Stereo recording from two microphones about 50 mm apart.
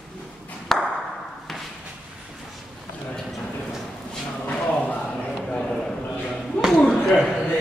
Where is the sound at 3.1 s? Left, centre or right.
Centre.